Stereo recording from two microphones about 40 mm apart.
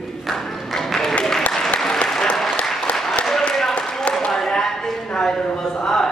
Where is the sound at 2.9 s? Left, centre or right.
Left.